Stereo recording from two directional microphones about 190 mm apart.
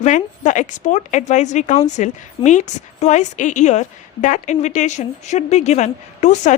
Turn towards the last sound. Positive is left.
turn(degrees=40)  # may be behind; listen again after turning